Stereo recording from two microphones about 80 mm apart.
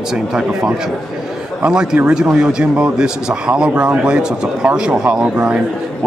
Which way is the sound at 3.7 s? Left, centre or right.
Right.